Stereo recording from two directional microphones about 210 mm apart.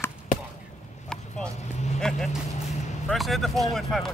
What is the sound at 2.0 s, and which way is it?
Vehicle, centre (ahead or behind).